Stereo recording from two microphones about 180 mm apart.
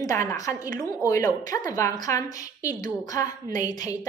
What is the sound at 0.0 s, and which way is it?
A woman's voice, 15° left (ahead or behind).